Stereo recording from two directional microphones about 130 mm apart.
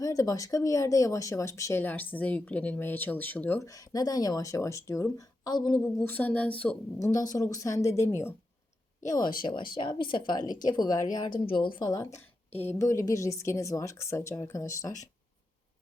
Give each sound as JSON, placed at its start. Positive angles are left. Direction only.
{"t": 0.0, "sound": "speech", "side_deg": 25}
{"t": 3.6, "sound": "a woman's voice", "side_deg": 25}
{"t": 5.8, "sound": "speech", "side_deg": 15}
{"t": 7.0, "sound": "a woman's voice", "side_deg": 25}
{"t": 9.0, "sound": "speech", "side_deg": 30}
{"t": 12.6, "sound": "a woman's voice", "side_deg": 25}